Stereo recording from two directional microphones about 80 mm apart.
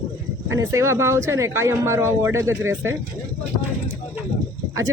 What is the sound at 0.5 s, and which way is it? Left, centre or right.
Speech, right.